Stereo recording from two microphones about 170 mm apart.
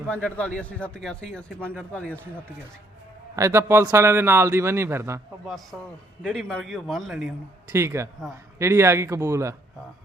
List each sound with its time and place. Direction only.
0.1 s a man's voice: 5° left (ahead or behind)
3.3 s a man's voice: 15° right (ahead or behind)
5.7 s a man's voice: centre (ahead or behind)
7.7 s a man's voice: 15° right (ahead or behind)